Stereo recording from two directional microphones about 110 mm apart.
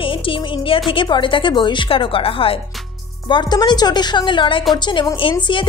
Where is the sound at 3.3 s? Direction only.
45° left (ahead or behind).